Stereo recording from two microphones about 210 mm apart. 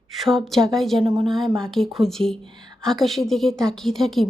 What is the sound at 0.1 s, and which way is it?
A woman's voice, centre (ahead or behind).